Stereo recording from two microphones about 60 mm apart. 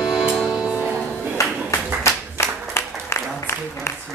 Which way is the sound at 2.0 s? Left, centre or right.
Left.